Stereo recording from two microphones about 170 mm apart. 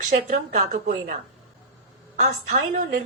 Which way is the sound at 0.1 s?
50° right (ahead or behind).